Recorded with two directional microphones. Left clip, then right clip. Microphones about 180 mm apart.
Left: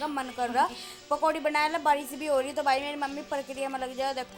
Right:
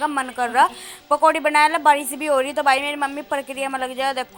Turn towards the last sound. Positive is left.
turn(degrees=-20)  # may be behind; listen again after turning